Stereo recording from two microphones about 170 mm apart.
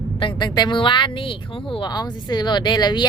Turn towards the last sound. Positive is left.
turn(degrees=25)  # may be behind; listen again after turning